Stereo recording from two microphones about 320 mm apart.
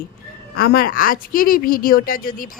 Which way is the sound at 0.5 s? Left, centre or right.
Left.